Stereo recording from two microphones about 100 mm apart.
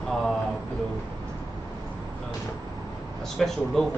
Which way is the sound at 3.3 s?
5° left (ahead or behind).